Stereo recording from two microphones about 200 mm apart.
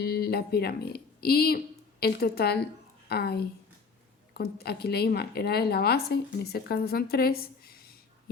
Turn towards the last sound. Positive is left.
turn(degrees=50)  # may be behind; listen again after turning